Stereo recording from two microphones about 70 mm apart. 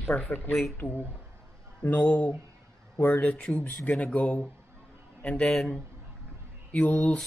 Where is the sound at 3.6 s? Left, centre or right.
Left.